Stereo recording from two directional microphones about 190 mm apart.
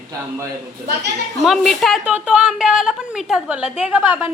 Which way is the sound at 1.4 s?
Centre (ahead or behind).